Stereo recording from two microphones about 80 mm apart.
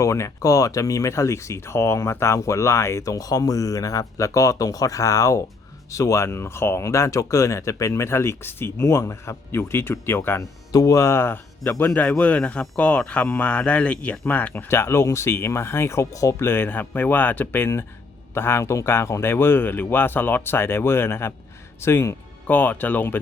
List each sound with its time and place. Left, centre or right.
0.0 s speech: left
10.7 s speech: left